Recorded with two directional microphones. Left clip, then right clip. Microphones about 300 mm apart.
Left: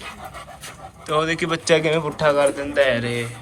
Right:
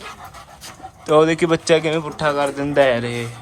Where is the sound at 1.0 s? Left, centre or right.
Centre.